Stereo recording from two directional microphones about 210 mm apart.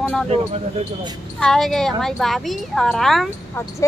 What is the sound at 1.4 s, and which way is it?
A woman's voice, centre (ahead or behind).